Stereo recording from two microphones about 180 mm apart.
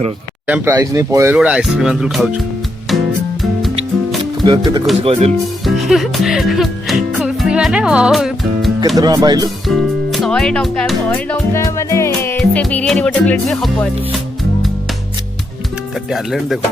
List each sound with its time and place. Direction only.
0.4 s speech: 10° right (ahead or behind)
1.4 s music: 5° right (ahead or behind)
4.4 s speech: 25° right (ahead or behind)
5.6 s music: centre (ahead or behind)
9.0 s speech: 20° right (ahead or behind)
9.6 s speech: centre (ahead or behind)
11.5 s music: 15° left (ahead or behind)
16.0 s music: centre (ahead or behind)